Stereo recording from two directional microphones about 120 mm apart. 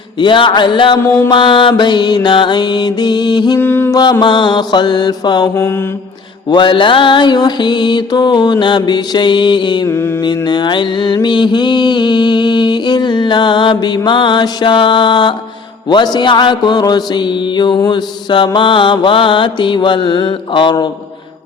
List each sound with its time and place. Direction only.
0.2 s mantra: 40° left (ahead or behind)
3.6 s mantra: 20° left (ahead or behind)
3.9 s mantra: 35° left (ahead or behind)
9.8 s mantra: 20° left (ahead or behind)
10.2 s mantra: 35° left (ahead or behind)